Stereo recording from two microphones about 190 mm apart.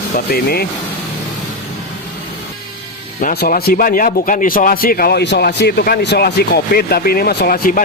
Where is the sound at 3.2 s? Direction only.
50° left (ahead or behind).